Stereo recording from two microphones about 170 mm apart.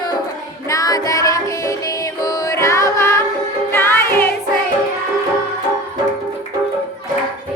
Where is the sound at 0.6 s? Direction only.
20° left (ahead or behind).